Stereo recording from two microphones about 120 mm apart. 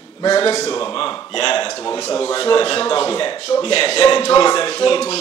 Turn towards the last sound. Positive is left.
turn(degrees=55)  # may be behind; listen again after turning